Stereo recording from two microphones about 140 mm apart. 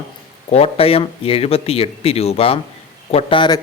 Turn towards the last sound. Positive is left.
turn(degrees=35)  # may be behind; listen again after turning